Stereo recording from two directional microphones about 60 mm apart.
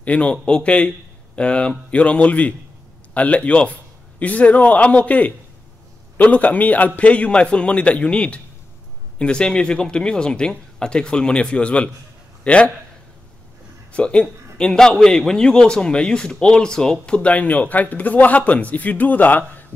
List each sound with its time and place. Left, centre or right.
0.0 s a man's voice: left
13.9 s a man's voice: centre